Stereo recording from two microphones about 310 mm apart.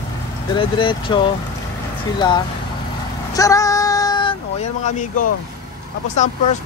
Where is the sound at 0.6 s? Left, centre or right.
Centre.